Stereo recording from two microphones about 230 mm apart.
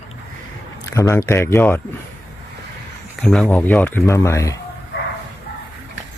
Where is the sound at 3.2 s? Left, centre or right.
Centre.